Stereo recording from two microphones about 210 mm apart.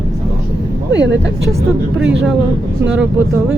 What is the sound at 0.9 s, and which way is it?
Speech, 60° right (ahead or behind).